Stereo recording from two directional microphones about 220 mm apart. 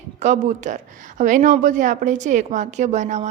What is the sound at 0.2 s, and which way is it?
Speech, 35° right (ahead or behind).